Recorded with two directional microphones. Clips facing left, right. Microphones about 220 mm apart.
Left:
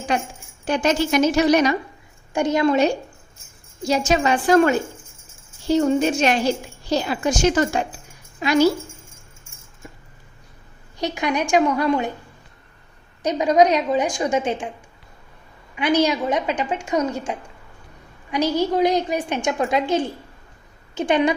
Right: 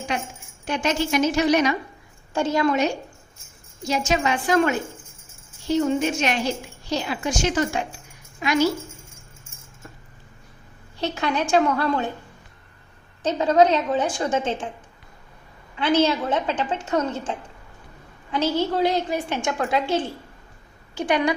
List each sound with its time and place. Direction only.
0.6 s a woman's voice: 35° left (ahead or behind)
2.3 s a woman's voice: 15° left (ahead or behind)
3.8 s a woman's voice: 35° left (ahead or behind)
10.9 s a woman's voice: 15° left (ahead or behind)
13.2 s a woman's voice: 15° left (ahead or behind)
15.7 s a woman's voice: 15° left (ahead or behind)